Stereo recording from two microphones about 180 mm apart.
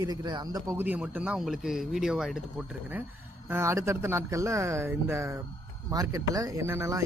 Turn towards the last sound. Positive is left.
turn(degrees=-15)  # may be behind; listen again after turning